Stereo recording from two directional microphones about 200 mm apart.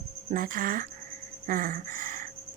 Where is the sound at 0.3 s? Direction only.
45° right (ahead or behind).